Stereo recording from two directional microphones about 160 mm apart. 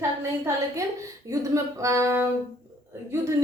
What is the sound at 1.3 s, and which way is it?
A woman's voice, 20° right (ahead or behind).